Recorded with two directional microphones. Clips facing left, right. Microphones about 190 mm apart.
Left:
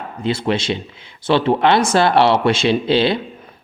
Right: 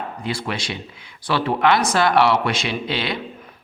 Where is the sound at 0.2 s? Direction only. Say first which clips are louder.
Left 10 dB; 25° left (ahead or behind).